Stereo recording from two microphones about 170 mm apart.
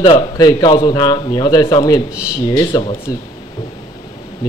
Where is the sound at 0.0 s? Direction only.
30° left (ahead or behind).